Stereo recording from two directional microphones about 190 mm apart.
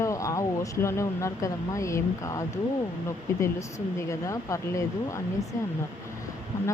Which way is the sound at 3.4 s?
15° left (ahead or behind).